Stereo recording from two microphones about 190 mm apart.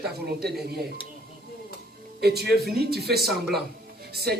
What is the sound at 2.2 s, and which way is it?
Speech, 60° right (ahead or behind).